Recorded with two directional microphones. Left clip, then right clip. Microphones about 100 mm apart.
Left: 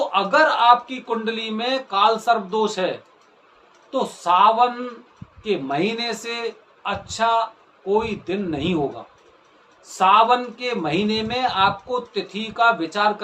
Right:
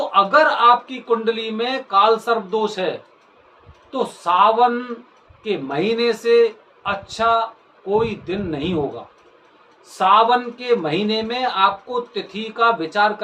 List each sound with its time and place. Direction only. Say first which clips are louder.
0.1 s speech: right 5 dB; 25° left (ahead or behind)
3.9 s speech: right 1 dB; 30° left (ahead or behind)
10.0 s speech: right 1 dB; 25° left (ahead or behind)